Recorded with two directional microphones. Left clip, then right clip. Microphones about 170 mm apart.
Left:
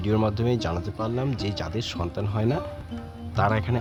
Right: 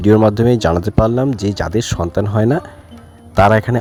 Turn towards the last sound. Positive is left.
turn(degrees=-55)  # may be behind; listen again after turning